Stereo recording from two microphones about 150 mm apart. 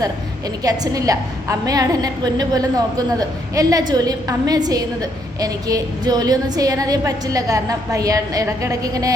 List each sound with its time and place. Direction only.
0.6 s a woman's voice: 25° right (ahead or behind)